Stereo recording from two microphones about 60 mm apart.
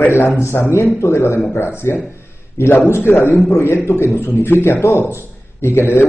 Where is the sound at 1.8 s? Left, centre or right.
Left.